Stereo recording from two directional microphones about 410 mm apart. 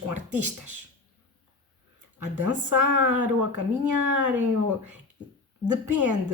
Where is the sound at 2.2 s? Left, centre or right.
Right.